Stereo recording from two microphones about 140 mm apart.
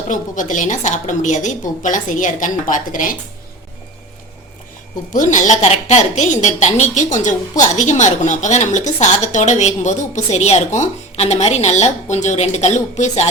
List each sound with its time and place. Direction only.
0.1 s a woman's voice: 65° left (ahead or behind)
5.1 s a woman's voice: 65° left (ahead or behind)